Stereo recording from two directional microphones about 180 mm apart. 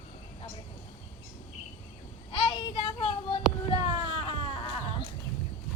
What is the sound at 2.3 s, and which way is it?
Child singing, 30° left (ahead or behind).